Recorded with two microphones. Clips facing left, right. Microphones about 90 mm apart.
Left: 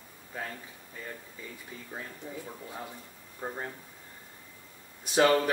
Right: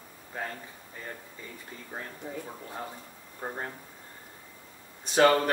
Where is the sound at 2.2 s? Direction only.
25° right (ahead or behind).